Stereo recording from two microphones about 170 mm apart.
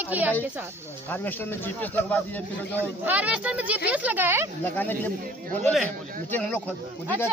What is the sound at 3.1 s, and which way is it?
Speech, 10° right (ahead or behind).